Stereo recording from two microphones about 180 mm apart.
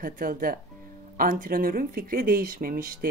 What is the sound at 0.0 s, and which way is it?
Speech, 50° right (ahead or behind).